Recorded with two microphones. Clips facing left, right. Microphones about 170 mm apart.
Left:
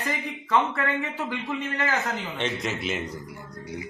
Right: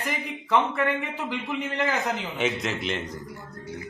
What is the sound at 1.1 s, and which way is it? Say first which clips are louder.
Speech: even; 15° right (ahead or behind).